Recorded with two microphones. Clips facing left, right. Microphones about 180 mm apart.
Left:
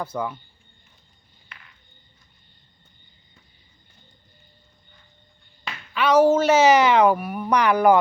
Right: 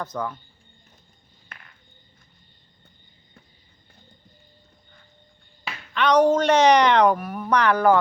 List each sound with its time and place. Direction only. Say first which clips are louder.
0.0 s speech: left 1 dB; 10° left (ahead or behind)
1.5 s a sound: right 2 dB; 45° right (ahead or behind)
5.9 s speech: left 1 dB; 5° left (ahead or behind)